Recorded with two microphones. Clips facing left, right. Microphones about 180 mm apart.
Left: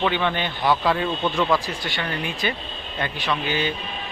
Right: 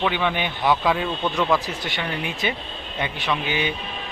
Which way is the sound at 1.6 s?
20° right (ahead or behind).